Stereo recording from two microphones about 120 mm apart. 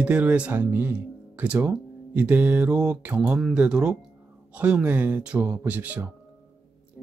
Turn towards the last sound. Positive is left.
turn(degrees=-15)  # may be behind; listen again after turning